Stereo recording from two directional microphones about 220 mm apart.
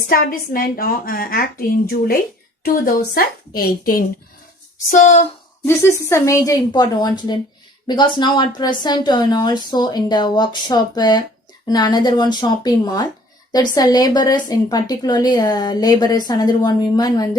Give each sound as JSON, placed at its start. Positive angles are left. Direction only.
{"t": 0.1, "sound": "a woman's voice", "side_deg": 40}
{"t": 3.2, "sound": "a woman's voice", "side_deg": 40}
{"t": 5.6, "sound": "a woman's voice", "side_deg": 10}